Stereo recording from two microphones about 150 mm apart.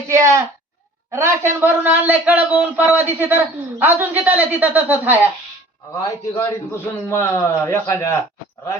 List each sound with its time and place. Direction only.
0.1 s speech: 20° right (ahead or behind)
5.9 s a man's voice: 20° left (ahead or behind)